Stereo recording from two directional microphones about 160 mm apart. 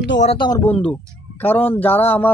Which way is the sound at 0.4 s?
25° left (ahead or behind).